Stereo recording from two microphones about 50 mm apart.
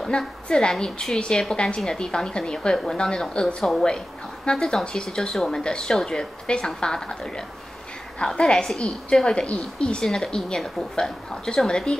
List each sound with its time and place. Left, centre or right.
0.1 s a woman's voice: centre